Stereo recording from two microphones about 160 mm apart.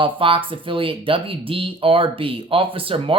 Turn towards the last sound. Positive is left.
turn(degrees=-35)  # may be behind; listen again after turning